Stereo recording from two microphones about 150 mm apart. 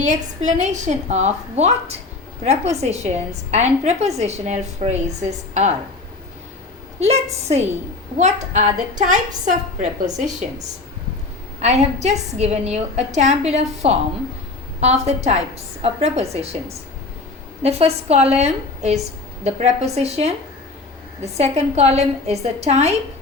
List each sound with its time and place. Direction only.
0.0 s a woman's voice: 50° right (ahead or behind)
7.0 s a woman's voice: 45° right (ahead or behind)
8.2 s a woman's voice: 50° right (ahead or behind)
11.6 s a woman's voice: 50° right (ahead or behind)